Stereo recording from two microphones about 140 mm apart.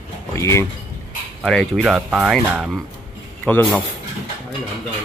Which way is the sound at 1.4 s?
5° left (ahead or behind).